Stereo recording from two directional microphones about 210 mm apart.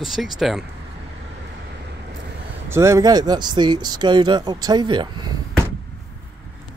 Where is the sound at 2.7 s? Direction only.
15° right (ahead or behind).